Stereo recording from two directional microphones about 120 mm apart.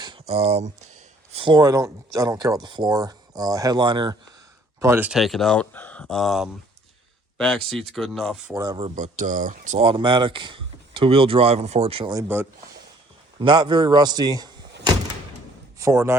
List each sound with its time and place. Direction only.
0.3 s speech: 60° right (ahead or behind)
1.3 s speech: 50° right (ahead or behind)
1.5 s speech: 25° right (ahead or behind)
4.8 s speech: 20° right (ahead or behind)
5.0 s speech: centre (ahead or behind)
8.5 s speech: 30° right (ahead or behind)
9.0 s speech: 90° right
9.8 s speech: 45° right (ahead or behind)
12.3 s speech: 15° right (ahead or behind)
13.4 s speech: 40° right (ahead or behind); by 16.1 s 25° right (ahead or behind)